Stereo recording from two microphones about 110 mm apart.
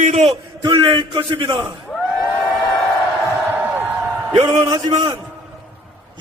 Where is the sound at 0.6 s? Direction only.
45° right (ahead or behind).